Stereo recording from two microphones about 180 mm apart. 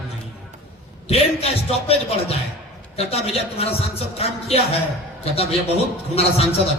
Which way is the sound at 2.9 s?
35° left (ahead or behind).